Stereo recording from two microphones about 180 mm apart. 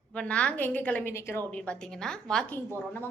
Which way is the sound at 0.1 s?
5° left (ahead or behind).